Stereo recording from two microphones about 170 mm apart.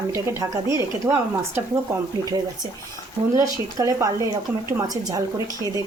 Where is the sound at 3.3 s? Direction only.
20° right (ahead or behind).